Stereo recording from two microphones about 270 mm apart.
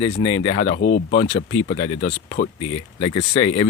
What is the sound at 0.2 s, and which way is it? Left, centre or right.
Speech, centre.